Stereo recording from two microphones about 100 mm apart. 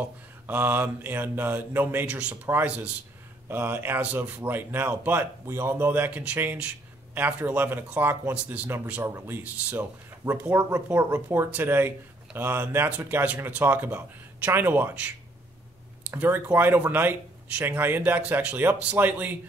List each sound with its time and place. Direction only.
0.0 s speech: 20° right (ahead or behind)